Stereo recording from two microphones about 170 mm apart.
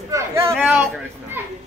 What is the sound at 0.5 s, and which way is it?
Speech, centre (ahead or behind).